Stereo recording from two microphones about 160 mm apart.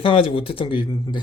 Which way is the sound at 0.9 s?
20° left (ahead or behind).